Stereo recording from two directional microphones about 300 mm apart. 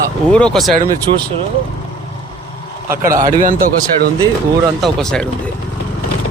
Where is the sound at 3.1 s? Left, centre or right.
Centre.